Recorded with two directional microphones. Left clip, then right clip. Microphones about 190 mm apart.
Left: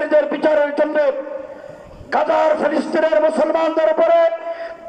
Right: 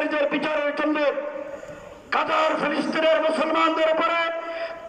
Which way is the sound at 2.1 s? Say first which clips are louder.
Left 6 dB; 45° left (ahead or behind).